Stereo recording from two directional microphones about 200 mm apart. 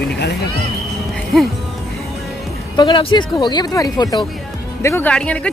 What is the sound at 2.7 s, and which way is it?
Speech, 20° left (ahead or behind).